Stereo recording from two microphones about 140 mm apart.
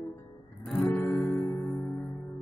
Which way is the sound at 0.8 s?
10° left (ahead or behind).